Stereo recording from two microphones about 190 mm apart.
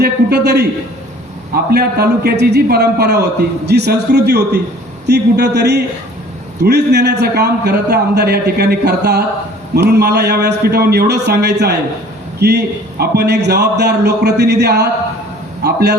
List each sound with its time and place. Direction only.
0.0 s a man's voice: 55° right (ahead or behind)
1.7 s a man's voice: 55° right (ahead or behind)